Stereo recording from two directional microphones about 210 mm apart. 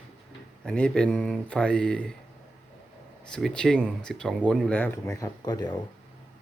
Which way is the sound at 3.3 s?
Centre (ahead or behind).